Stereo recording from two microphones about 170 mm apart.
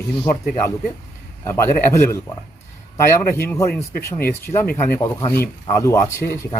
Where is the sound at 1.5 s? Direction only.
15° left (ahead or behind).